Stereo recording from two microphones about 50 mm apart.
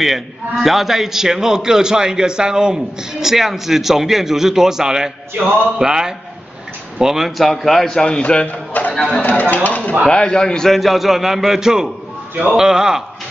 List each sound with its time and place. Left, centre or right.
0.0 s a man's voice: centre
8.5 s a sound: left
9.3 s speech: left
10.0 s a man's voice: centre